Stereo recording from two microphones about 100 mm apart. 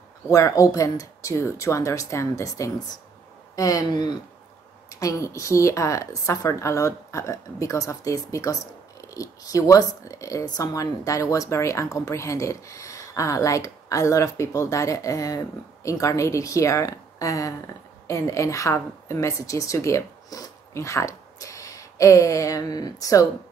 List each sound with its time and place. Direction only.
0.3 s speech: 35° left (ahead or behind)
4.9 s a woman's voice: 35° left (ahead or behind)